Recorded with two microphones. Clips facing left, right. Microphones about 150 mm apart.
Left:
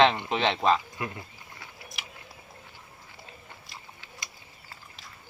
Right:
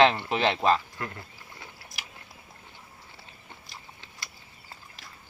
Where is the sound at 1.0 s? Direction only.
15° left (ahead or behind).